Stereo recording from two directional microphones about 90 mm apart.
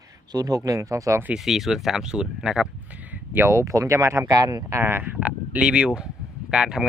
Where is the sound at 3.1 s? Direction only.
25° right (ahead or behind); by 4.8 s 40° right (ahead or behind).